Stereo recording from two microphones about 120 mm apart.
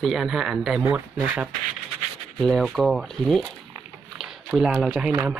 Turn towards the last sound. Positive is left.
turn(degrees=0)  # may be behind; listen again after turning